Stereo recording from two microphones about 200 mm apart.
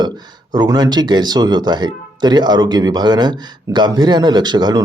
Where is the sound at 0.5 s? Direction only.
20° right (ahead or behind).